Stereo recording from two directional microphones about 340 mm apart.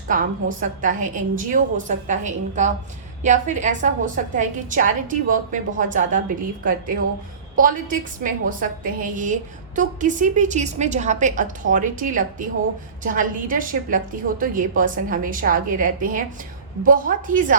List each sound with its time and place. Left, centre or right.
0.1 s a woman's voice: right